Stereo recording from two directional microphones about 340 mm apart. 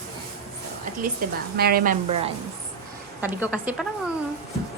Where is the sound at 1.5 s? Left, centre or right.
Right.